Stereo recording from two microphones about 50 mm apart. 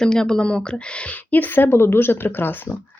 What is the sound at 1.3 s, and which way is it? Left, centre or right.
Speech, left.